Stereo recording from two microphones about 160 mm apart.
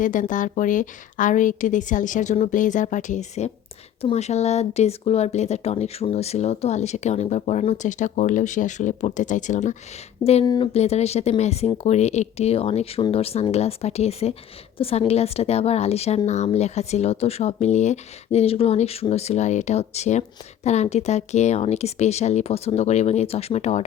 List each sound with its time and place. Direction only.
0.0 s speech: 55° left (ahead or behind)
10.4 s speech: 25° left (ahead or behind)
10.8 s speech: 40° left (ahead or behind)